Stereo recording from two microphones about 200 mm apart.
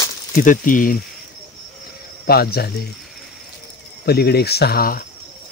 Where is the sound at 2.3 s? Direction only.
50° left (ahead or behind).